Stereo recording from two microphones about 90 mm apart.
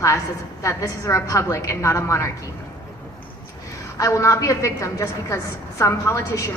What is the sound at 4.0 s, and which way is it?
A woman's voice, 35° left (ahead or behind).